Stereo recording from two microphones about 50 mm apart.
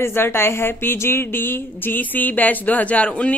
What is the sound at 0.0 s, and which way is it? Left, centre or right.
A woman's voice, left.